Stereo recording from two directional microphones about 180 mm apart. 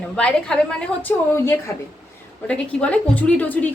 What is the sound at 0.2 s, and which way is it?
A woman's voice, 5° left (ahead or behind).